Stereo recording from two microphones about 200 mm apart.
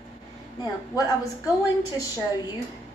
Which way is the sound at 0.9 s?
20° left (ahead or behind).